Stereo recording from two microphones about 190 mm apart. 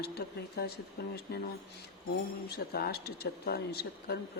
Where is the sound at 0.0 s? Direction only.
55° left (ahead or behind).